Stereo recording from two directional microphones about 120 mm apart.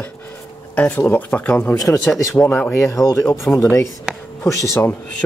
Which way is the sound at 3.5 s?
15° left (ahead or behind).